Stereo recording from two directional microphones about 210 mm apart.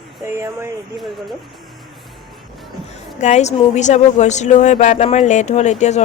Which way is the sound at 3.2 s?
35° left (ahead or behind).